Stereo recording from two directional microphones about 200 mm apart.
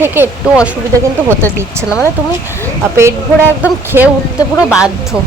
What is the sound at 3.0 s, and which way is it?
Speech, 10° right (ahead or behind).